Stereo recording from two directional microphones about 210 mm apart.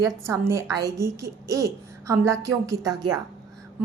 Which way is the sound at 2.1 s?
15° right (ahead or behind).